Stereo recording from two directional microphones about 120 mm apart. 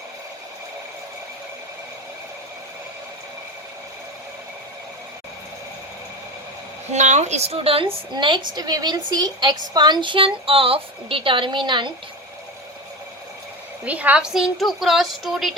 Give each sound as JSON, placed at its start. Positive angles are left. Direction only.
{"t": 6.9, "sound": "a woman's voice", "side_deg": -80}
{"t": 13.8, "sound": "a woman's voice", "side_deg": -10}